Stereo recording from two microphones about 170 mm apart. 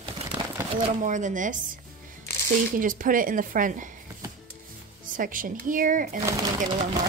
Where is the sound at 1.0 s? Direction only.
45° right (ahead or behind).